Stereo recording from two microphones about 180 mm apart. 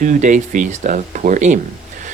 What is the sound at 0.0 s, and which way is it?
Speech, 45° right (ahead or behind).